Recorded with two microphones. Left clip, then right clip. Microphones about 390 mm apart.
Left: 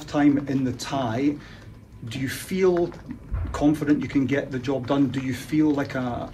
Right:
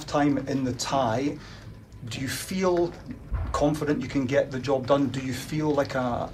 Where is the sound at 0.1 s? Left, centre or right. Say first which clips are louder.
Left 3 dB; centre.